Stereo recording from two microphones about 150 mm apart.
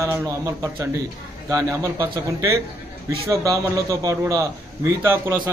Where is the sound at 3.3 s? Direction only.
20° right (ahead or behind).